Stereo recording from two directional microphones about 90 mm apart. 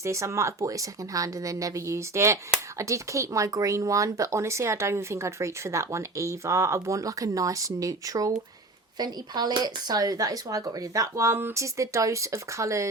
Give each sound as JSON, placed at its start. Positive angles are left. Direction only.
{"t": 0.0, "sound": "speech", "side_deg": -35}